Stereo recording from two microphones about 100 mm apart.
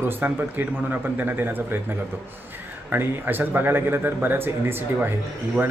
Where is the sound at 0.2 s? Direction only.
20° right (ahead or behind).